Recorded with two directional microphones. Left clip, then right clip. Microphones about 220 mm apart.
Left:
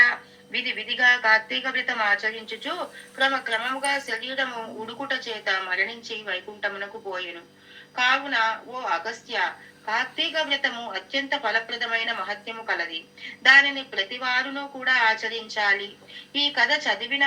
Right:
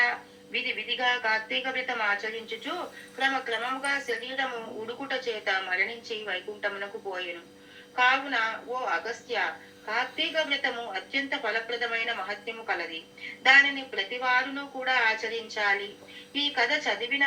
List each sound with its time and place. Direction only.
0.0 s a woman's voice: 50° left (ahead or behind)